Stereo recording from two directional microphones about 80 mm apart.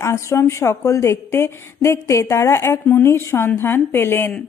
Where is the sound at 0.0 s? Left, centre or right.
Left.